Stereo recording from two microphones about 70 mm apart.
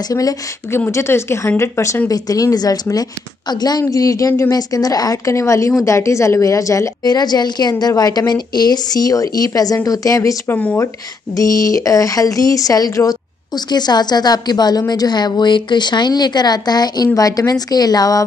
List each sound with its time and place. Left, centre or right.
0.7 s a woman's voice: left
7.1 s a woman's voice: left
7.8 s a woman's voice: left
10.5 s speech: left
11.3 s a woman's voice: left
13.7 s a woman's voice: left